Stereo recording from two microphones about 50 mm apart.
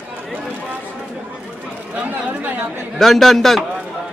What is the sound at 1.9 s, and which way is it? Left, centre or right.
Chatter, right.